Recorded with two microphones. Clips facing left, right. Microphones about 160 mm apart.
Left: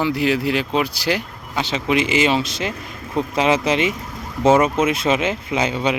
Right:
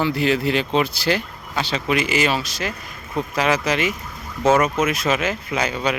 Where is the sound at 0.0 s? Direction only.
10° left (ahead or behind).